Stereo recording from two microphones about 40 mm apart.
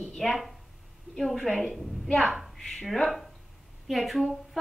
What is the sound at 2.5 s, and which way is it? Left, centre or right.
Speech, centre.